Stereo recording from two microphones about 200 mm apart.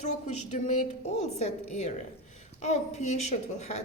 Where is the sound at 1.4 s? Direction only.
35° left (ahead or behind).